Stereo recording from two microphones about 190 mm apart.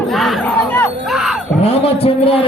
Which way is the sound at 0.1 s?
Centre (ahead or behind).